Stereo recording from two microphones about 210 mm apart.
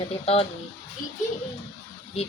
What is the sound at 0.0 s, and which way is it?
Speech, 25° left (ahead or behind).